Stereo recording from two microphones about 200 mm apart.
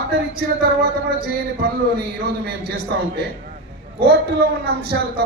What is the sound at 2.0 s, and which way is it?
Speech, 50° right (ahead or behind).